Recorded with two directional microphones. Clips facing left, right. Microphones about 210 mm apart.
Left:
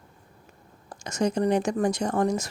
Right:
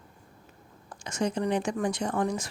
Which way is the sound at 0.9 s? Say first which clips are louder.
Left 4 dB; 40° left (ahead or behind).